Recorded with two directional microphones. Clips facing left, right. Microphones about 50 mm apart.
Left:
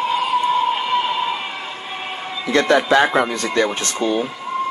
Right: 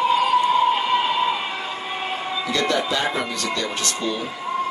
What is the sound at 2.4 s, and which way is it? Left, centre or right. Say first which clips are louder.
Speech: left 8 dB; left.